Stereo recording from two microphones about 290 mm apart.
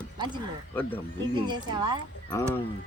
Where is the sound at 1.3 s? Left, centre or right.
Centre.